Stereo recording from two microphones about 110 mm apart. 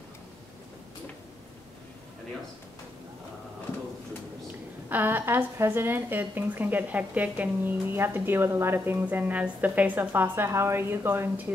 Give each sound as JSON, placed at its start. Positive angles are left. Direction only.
{"t": 4.8, "sound": "a woman's voice", "side_deg": -15}